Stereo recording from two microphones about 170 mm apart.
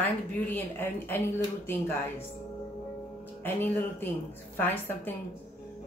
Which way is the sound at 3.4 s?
10° left (ahead or behind).